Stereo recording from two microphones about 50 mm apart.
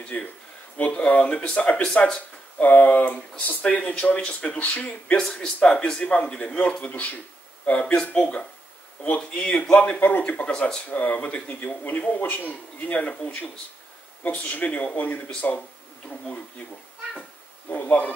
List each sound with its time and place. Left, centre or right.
0.0 s speech: left
2.6 s speech: left
5.1 s speech: centre; by 7.2 s left
7.8 s speech: centre
10.5 s speech: centre
10.9 s speech: left
12.1 s speech: left
17.6 s speech: left